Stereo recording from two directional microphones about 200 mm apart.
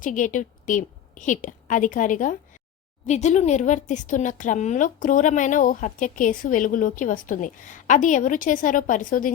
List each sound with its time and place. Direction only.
0.0 s a woman's voice: 40° left (ahead or behind)